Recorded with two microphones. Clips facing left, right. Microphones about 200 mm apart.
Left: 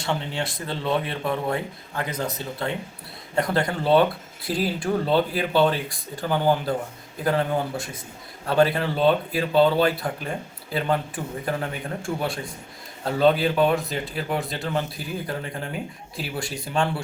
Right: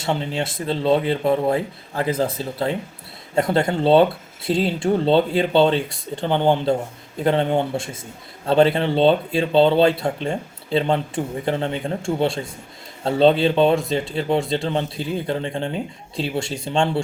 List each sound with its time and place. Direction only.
0.0 s speech: 25° right (ahead or behind)